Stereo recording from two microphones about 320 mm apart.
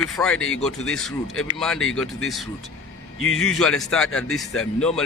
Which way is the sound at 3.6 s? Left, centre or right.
Centre.